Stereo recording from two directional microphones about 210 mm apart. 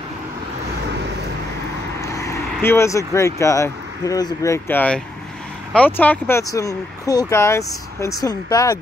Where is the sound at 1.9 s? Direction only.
15° left (ahead or behind).